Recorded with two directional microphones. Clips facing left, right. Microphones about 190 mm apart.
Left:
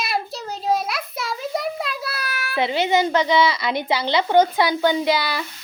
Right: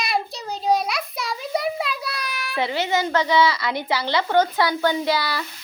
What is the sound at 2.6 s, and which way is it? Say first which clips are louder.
A woman's voice: left 3 dB; 15° left (ahead or behind).